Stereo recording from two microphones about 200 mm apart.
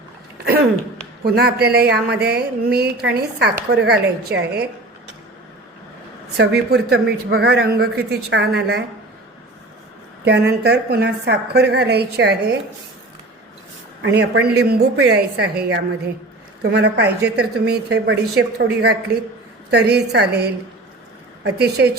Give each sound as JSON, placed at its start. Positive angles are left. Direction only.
{"t": 0.4, "sound": "a sound", "side_deg": -50}
{"t": 1.2, "sound": "speech", "side_deg": -55}
{"t": 6.3, "sound": "speech", "side_deg": -55}
{"t": 10.2, "sound": "speech", "side_deg": -55}
{"t": 14.0, "sound": "speech", "side_deg": -60}